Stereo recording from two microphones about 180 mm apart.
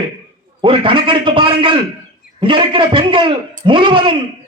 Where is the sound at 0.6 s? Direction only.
30° right (ahead or behind).